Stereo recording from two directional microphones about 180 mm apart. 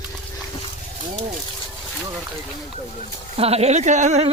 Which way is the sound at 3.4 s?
35° right (ahead or behind).